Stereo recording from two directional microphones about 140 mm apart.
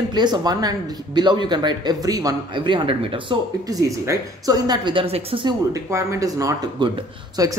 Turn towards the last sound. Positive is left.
turn(degrees=-25)  # may be behind; listen again after turning